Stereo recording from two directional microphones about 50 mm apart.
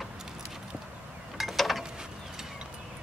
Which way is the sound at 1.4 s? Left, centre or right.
Centre.